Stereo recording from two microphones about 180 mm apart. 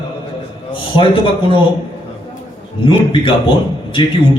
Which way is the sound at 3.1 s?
30° left (ahead or behind).